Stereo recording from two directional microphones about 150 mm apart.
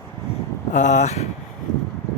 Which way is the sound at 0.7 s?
55° left (ahead or behind).